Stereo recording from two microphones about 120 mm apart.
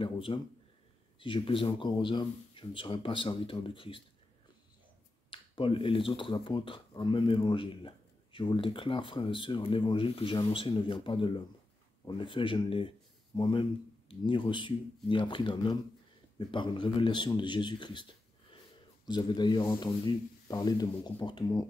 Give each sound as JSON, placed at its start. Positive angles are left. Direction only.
{"t": 0.0, "sound": "speech", "side_deg": 50}
{"t": 5.3, "sound": "a man's voice", "side_deg": 45}